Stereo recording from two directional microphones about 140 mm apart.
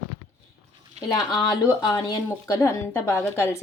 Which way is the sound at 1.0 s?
50° right (ahead or behind).